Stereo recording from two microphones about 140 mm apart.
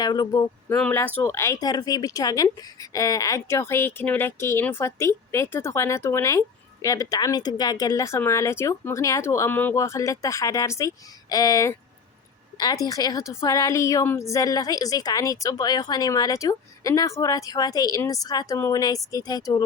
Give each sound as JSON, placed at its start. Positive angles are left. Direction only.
{"t": 0.0, "sound": "a woman's voice", "side_deg": 30}
{"t": 0.7, "sound": "a woman's voice", "side_deg": 15}